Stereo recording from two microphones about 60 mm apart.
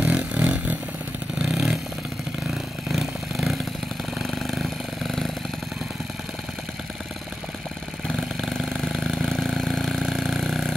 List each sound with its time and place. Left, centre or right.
0.0 s a sound: right
1.4 s vehicle: centre
2.9 s vehicle: centre
8.2 s vehicle: centre